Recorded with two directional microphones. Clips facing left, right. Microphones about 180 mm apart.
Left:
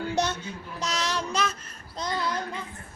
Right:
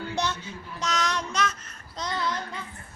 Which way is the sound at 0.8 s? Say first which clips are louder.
Right 1 dB; 35° left (ahead or behind).